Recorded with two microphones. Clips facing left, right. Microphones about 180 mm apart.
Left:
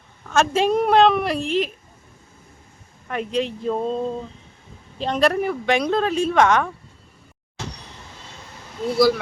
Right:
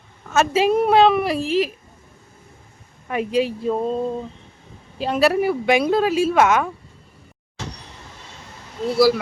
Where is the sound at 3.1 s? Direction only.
10° right (ahead or behind).